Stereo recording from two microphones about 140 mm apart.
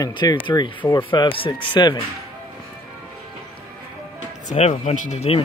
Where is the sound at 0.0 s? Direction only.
30° left (ahead or behind).